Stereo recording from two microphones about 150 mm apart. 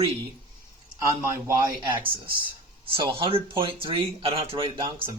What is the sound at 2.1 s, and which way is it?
Speech, 35° right (ahead or behind).